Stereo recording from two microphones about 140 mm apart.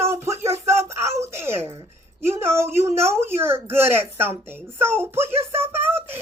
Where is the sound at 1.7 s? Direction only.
45° right (ahead or behind).